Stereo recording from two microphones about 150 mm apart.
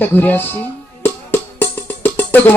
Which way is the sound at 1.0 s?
15° left (ahead or behind).